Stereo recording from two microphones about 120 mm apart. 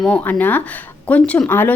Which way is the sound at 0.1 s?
15° left (ahead or behind).